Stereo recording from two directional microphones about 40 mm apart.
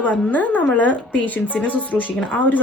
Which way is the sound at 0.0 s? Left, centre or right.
Left.